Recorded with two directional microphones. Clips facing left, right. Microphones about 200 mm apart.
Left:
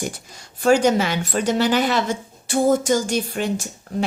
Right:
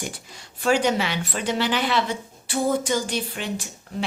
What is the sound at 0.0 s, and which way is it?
A woman's voice, 45° left (ahead or behind).